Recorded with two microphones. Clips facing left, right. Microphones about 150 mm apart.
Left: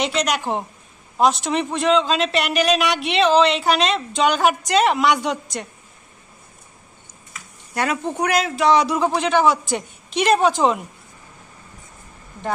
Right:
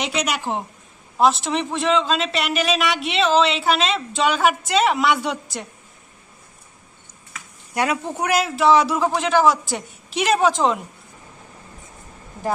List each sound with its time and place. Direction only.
0.0 s a man's voice: 5° right (ahead or behind)
7.7 s a man's voice: 10° right (ahead or behind)